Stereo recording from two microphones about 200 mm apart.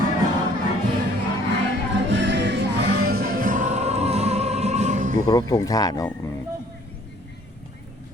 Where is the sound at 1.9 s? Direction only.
60° right (ahead or behind); by 5.2 s 40° right (ahead or behind).